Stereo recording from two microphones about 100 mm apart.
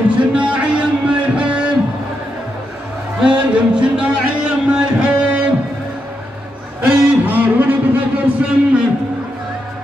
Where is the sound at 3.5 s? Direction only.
10° right (ahead or behind).